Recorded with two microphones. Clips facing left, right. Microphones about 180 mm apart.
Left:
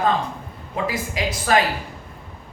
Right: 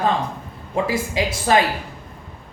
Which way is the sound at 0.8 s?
30° right (ahead or behind).